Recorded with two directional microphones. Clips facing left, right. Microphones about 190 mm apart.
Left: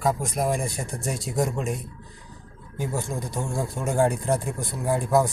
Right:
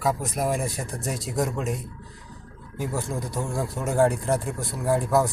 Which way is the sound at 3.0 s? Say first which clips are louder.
Right 1 dB; centre (ahead or behind).